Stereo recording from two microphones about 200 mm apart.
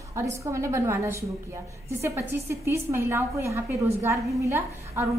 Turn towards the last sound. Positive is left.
turn(degrees=-15)  # may be behind; listen again after turning